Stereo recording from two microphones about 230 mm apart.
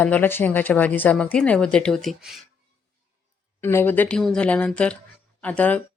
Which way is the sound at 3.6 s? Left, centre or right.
Centre.